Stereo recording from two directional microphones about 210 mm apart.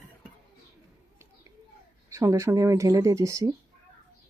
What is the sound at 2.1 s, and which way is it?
Speech, 15° right (ahead or behind).